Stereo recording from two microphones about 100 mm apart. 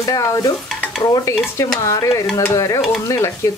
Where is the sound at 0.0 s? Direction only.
35° left (ahead or behind).